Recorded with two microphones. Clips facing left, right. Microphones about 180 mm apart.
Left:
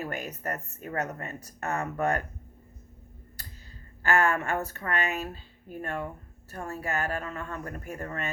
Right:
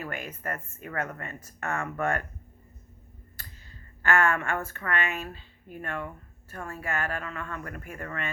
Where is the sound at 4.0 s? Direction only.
35° left (ahead or behind).